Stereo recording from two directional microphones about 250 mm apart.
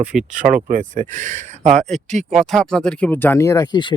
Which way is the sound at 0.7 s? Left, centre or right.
Right.